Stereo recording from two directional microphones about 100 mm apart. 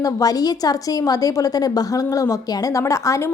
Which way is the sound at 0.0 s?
40° left (ahead or behind).